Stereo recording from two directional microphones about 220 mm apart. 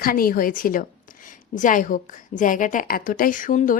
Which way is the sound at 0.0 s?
40° left (ahead or behind).